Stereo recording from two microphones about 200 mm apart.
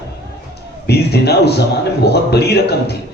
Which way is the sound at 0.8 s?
55° left (ahead or behind).